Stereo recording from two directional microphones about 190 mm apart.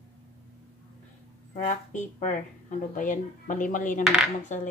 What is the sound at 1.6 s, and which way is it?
A woman's voice, 40° left (ahead or behind).